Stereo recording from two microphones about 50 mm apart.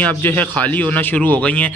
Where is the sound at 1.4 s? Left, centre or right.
Left.